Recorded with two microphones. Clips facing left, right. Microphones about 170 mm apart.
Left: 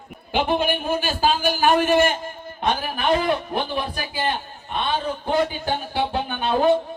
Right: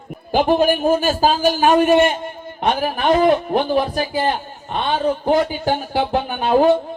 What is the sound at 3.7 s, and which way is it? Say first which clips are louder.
A man's voice: right 9 dB; 35° right (ahead or behind).